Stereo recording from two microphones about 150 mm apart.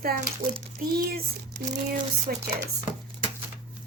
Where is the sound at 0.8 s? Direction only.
90° right.